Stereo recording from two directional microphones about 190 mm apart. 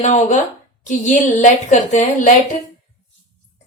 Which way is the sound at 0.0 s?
40° left (ahead or behind).